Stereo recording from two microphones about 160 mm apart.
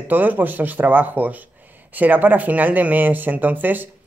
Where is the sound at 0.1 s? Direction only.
10° right (ahead or behind).